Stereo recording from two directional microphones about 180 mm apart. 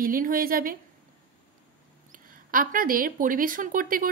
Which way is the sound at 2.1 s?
50° right (ahead or behind).